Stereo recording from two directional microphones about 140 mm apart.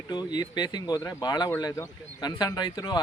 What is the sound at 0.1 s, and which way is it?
Speech, 30° left (ahead or behind).